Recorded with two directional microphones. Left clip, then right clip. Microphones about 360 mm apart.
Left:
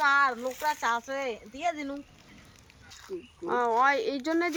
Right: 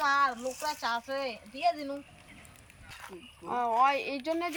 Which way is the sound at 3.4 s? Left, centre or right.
Centre.